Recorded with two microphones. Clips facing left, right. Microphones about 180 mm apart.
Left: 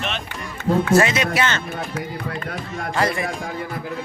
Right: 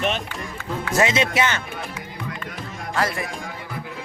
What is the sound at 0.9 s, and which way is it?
Speech, 25° right (ahead or behind).